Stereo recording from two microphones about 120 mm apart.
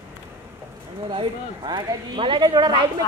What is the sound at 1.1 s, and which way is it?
Speech, 40° right (ahead or behind).